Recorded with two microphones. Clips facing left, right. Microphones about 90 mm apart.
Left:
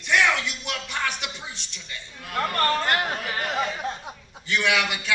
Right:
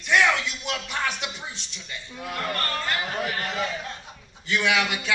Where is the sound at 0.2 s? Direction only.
5° right (ahead or behind).